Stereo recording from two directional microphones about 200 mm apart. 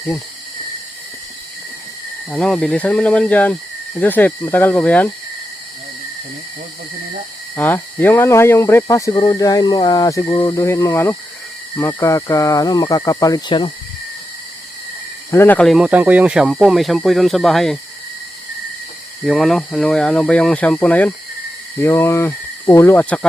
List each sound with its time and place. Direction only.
2.3 s speech: centre (ahead or behind)
7.5 s speech: 10° left (ahead or behind)
15.3 s speech: 10° left (ahead or behind)
19.2 s speech: centre (ahead or behind)